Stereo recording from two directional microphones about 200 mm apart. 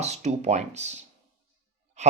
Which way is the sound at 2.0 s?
35° right (ahead or behind).